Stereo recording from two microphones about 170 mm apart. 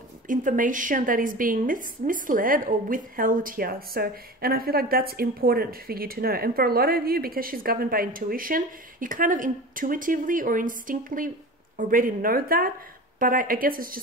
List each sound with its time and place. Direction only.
0.3 s a woman's voice: 50° right (ahead or behind)